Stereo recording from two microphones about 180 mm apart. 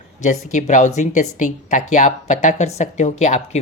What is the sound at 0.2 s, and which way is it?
Speech, 40° left (ahead or behind).